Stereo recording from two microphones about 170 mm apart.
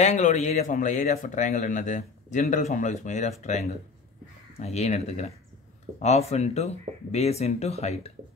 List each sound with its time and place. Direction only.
0.0 s speech: 40° left (ahead or behind)